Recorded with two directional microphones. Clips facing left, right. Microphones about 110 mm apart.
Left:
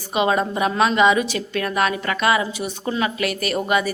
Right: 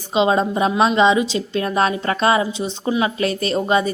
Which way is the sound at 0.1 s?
25° right (ahead or behind).